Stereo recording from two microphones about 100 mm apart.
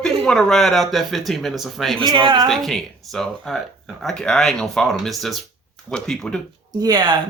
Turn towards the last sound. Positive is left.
turn(degrees=-45)  # may be behind; listen again after turning